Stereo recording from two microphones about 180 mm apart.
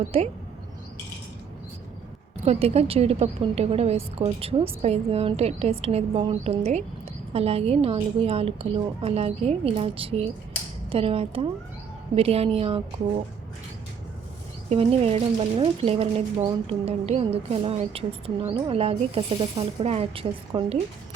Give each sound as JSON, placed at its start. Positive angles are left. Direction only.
{"t": 0.0, "sound": "speech", "side_deg": -35}
{"t": 2.4, "sound": "speech", "side_deg": -35}
{"t": 14.7, "sound": "speech", "side_deg": -35}